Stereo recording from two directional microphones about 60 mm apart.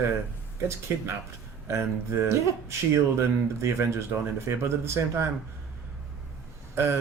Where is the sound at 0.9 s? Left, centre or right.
Right.